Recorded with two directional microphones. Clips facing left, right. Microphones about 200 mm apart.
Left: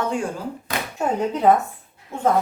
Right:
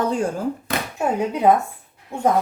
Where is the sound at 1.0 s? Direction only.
10° right (ahead or behind).